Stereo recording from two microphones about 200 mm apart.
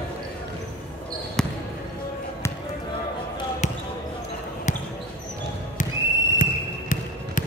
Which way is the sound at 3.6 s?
35° left (ahead or behind).